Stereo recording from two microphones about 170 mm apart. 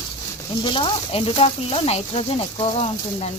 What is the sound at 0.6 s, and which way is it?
Speech, 30° left (ahead or behind).